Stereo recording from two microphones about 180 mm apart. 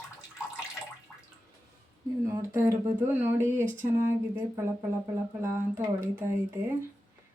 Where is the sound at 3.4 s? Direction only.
45° right (ahead or behind).